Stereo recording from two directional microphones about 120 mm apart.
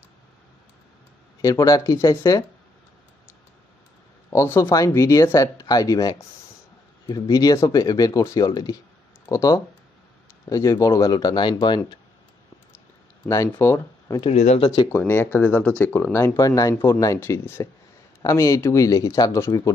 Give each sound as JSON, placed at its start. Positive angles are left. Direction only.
{"t": 1.4, "sound": "speech", "side_deg": 30}
{"t": 4.3, "sound": "speech", "side_deg": 25}
{"t": 13.5, "sound": "speech", "side_deg": 20}
{"t": 14.3, "sound": "speech", "side_deg": 70}
{"t": 14.7, "sound": "speech", "side_deg": 25}